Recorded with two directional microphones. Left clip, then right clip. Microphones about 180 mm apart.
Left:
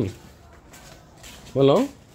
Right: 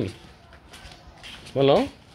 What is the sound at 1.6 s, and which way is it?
Speech, 25° left (ahead or behind).